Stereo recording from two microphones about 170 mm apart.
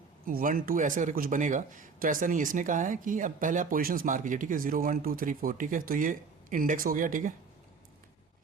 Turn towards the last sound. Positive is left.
turn(degrees=-50)  # may be behind; listen again after turning